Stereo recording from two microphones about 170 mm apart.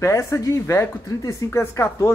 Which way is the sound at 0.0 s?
15° left (ahead or behind).